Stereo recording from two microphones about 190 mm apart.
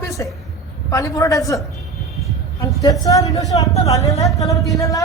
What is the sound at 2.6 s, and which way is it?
A woman's voice, 20° left (ahead or behind).